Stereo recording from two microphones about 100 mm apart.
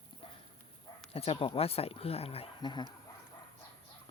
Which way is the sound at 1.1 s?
75° left (ahead or behind).